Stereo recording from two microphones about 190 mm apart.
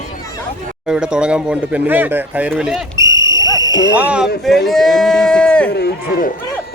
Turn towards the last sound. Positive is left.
turn(degrees=55)  # may be behind; listen again after turning